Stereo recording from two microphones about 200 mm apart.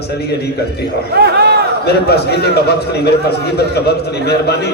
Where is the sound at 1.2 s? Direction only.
55° right (ahead or behind).